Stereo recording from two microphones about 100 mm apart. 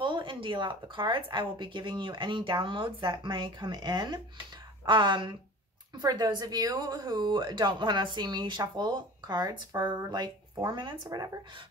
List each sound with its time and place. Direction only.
0.0 s speech: 55° right (ahead or behind)